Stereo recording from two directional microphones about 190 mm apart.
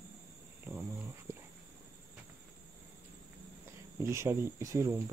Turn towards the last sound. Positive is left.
turn(degrees=-15)  # may be behind; listen again after turning